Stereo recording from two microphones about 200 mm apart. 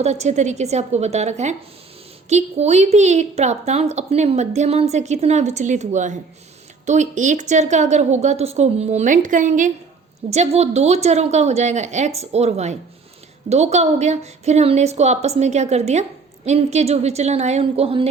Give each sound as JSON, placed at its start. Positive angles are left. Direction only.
{"t": 0.0, "sound": "a woman's voice", "side_deg": -35}